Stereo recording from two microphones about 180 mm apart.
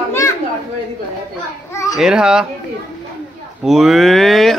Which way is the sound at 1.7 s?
15° left (ahead or behind).